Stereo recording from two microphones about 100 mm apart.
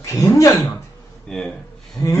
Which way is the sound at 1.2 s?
5° left (ahead or behind).